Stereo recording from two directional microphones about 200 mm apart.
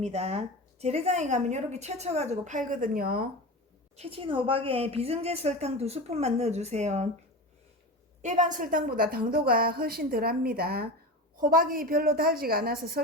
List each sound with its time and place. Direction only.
0.0 s a woman's voice: 30° right (ahead or behind); by 3.2 s 50° right (ahead or behind)
3.9 s a woman's voice: 30° right (ahead or behind)
8.2 s a woman's voice: 35° right (ahead or behind)